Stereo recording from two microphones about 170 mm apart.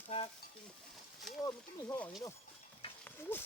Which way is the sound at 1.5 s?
20° left (ahead or behind).